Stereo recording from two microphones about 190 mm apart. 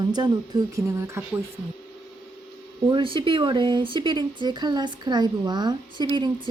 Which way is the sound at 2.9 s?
25° right (ahead or behind).